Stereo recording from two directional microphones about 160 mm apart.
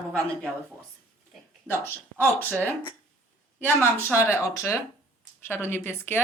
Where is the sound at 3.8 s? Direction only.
15° left (ahead or behind).